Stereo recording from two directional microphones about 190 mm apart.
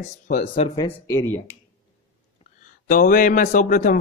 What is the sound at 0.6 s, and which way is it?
Speech, 30° left (ahead or behind).